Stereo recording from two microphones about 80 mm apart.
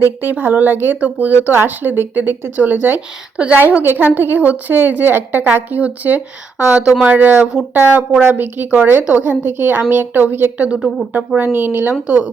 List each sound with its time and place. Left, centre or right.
0.2 s speech: right
10.8 s speech: centre
11.3 s speech: right